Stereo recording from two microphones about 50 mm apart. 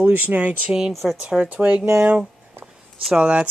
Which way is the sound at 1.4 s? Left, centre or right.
Right.